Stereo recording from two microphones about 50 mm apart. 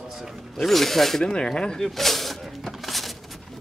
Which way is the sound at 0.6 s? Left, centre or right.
Centre.